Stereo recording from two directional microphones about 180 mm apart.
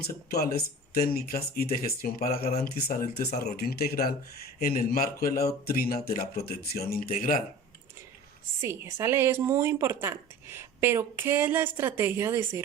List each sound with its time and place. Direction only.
0.0 s speech: 60° left (ahead or behind)
8.6 s a woman's voice: 15° right (ahead or behind)